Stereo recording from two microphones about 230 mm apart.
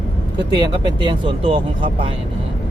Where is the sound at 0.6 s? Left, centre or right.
Centre.